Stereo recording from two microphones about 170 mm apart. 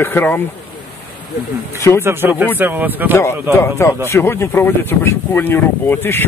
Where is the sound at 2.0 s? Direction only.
15° right (ahead or behind).